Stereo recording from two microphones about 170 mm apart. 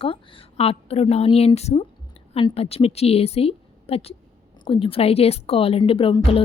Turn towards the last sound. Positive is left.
turn(degrees=30)  # may be behind; listen again after turning